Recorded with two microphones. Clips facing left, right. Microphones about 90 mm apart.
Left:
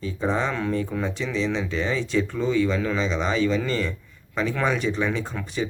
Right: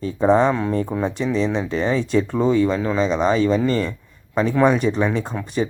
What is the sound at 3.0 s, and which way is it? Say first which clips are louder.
Speech: right 6 dB; 45° right (ahead or behind).